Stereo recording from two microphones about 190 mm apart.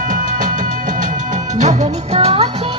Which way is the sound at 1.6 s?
40° right (ahead or behind).